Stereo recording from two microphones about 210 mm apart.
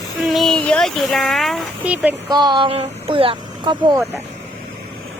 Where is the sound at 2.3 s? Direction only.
20° right (ahead or behind).